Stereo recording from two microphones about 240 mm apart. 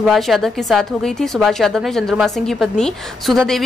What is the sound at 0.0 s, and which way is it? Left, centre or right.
A woman's voice, centre.